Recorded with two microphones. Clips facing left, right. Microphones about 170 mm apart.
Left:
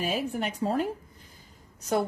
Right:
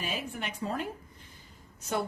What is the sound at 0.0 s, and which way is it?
Speech, 40° left (ahead or behind).